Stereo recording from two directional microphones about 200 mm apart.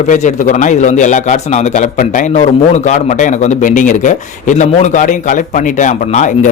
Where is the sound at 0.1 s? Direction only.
40° left (ahead or behind).